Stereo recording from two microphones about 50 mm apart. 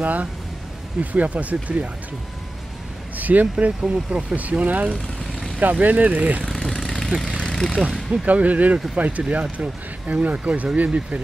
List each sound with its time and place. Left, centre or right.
0.0 s speech: right
3.2 s speech: right
6.7 s vehicle: centre
7.1 s speech: centre
7.3 s vehicle: centre
8.3 s speech: right